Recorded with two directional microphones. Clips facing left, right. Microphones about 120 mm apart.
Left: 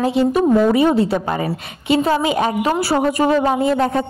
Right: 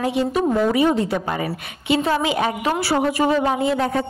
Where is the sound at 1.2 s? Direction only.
40° left (ahead or behind).